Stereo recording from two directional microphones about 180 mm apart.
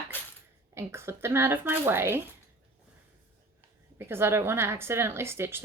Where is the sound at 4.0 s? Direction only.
15° right (ahead or behind).